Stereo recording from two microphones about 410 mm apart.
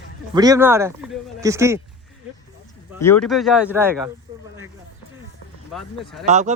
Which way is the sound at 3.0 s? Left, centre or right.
Centre.